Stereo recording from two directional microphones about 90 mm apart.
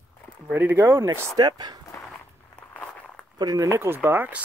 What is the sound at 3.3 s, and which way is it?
Speech, 45° right (ahead or behind).